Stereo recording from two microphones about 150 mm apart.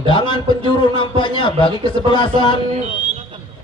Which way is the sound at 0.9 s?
30° left (ahead or behind).